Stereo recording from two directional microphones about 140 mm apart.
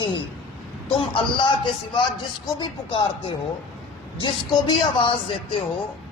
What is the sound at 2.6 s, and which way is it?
Speech, 35° left (ahead or behind).